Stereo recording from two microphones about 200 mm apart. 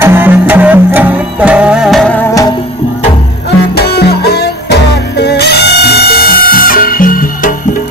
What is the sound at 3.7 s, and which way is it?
Music, 55° left (ahead or behind).